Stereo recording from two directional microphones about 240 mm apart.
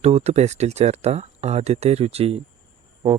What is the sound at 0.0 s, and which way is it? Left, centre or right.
Speech, right.